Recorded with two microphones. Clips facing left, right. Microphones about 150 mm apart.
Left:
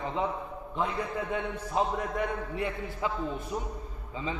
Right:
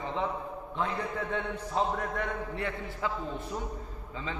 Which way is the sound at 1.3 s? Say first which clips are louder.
Left 2 dB; 15° left (ahead or behind).